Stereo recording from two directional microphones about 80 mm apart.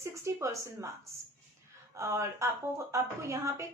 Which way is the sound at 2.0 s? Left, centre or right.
Right.